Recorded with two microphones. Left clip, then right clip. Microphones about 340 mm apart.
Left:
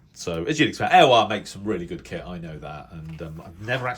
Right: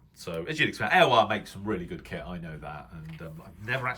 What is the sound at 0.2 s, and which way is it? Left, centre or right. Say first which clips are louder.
Speech: left 6 dB; centre.